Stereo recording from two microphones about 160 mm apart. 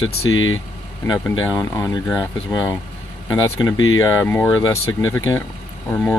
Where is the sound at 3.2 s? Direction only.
20° left (ahead or behind).